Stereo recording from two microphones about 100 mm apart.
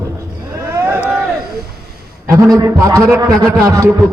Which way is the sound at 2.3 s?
30° right (ahead or behind).